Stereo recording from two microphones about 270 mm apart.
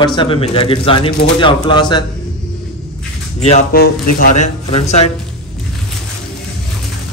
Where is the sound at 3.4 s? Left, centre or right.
Left.